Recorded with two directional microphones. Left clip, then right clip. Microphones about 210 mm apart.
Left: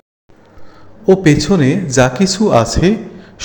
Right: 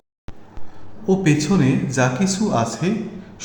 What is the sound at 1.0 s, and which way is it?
A man's voice, 30° left (ahead or behind).